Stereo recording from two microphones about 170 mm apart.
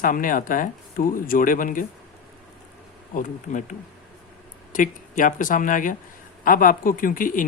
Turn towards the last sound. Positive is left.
turn(degrees=50)  # may be behind; listen again after turning